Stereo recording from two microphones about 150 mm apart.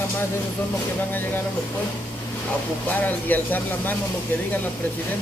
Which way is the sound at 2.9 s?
10° left (ahead or behind).